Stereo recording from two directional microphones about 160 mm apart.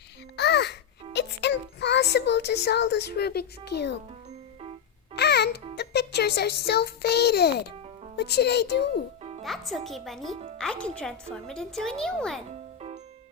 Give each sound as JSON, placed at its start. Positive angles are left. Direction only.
{"t": 0.3, "sound": "babbling", "side_deg": 90}
{"t": 1.1, "sound": "speech", "side_deg": 90}
{"t": 5.1, "sound": "music", "side_deg": 90}
{"t": 8.1, "sound": "speech", "side_deg": 90}
{"t": 9.4, "sound": "a woman's voice", "side_deg": 0}